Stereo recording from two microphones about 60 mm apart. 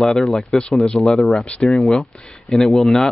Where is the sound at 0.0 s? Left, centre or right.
Centre.